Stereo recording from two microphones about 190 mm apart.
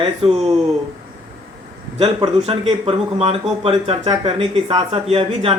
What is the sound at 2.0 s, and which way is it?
Speech, 30° right (ahead or behind).